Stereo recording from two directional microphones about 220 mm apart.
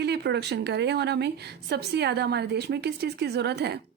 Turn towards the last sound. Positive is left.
turn(degrees=-50)  # may be behind; listen again after turning